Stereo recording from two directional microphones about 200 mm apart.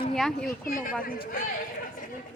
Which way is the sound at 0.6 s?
45° left (ahead or behind).